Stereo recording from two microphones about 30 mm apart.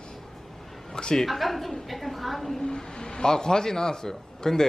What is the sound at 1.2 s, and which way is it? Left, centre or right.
A woman's voice, centre.